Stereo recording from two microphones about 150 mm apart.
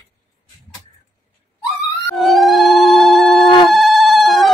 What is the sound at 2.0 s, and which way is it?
Telephone bell ringing, centre (ahead or behind).